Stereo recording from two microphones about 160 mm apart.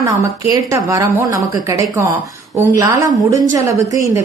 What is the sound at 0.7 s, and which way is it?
A woman's voice, 20° right (ahead or behind).